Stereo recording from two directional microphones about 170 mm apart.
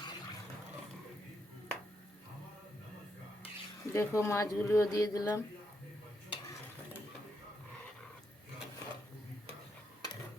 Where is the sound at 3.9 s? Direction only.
15° left (ahead or behind).